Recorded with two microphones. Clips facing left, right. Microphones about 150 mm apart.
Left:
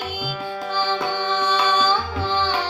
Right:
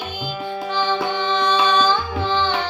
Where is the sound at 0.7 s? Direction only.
15° right (ahead or behind).